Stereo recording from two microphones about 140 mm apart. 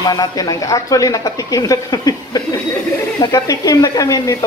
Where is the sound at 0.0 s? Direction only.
25° left (ahead or behind).